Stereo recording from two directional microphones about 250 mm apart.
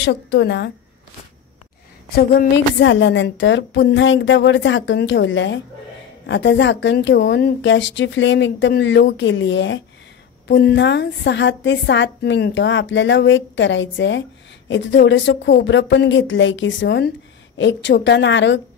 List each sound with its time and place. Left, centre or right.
0.0 s a woman's voice: left
2.0 s a woman's voice: left